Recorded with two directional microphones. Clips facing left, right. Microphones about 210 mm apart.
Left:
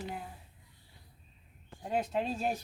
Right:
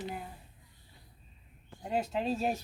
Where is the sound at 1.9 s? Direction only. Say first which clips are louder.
Right 1 dB; centre (ahead or behind).